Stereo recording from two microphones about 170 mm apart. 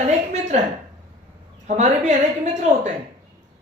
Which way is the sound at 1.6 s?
45° right (ahead or behind).